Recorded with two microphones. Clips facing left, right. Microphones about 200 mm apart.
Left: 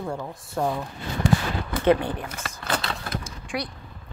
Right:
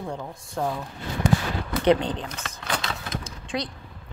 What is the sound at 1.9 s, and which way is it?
Speech, 20° right (ahead or behind).